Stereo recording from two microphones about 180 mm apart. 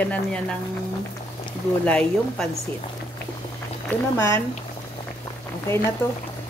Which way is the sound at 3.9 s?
10° left (ahead or behind).